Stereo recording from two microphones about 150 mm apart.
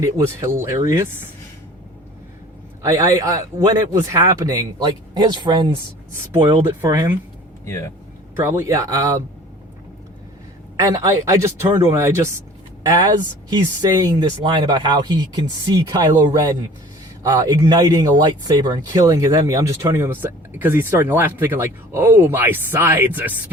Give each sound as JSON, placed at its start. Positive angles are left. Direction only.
{"t": 0.0, "sound": "speech", "side_deg": -20}
{"t": 2.8, "sound": "speech", "side_deg": -20}
{"t": 6.7, "sound": "speech", "side_deg": -20}
{"t": 7.6, "sound": "speech", "side_deg": 20}
{"t": 8.4, "sound": "speech", "side_deg": -15}
{"t": 11.0, "sound": "speech", "side_deg": -20}